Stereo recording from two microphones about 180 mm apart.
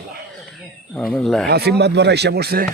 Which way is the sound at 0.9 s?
5° left (ahead or behind).